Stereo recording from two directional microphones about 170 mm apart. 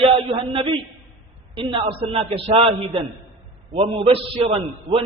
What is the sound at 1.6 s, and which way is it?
A man's voice, 30° right (ahead or behind).